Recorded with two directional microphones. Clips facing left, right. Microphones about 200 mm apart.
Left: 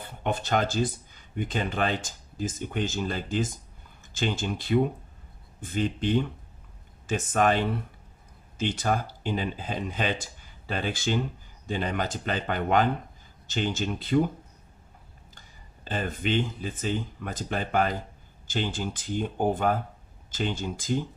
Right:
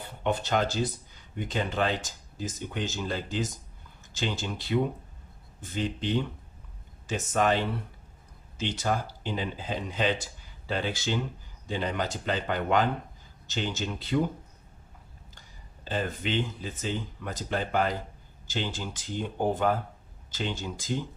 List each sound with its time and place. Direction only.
0.2 s speech: 50° left (ahead or behind)
15.9 s speech: 50° left (ahead or behind)